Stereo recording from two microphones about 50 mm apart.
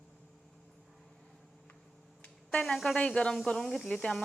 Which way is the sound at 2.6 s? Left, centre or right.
Centre.